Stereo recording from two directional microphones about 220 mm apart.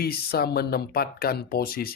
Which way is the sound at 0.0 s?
45° left (ahead or behind).